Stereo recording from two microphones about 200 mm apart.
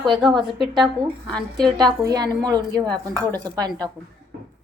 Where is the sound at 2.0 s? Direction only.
20° right (ahead or behind).